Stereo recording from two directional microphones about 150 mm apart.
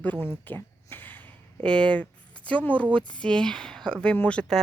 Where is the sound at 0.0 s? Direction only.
10° left (ahead or behind).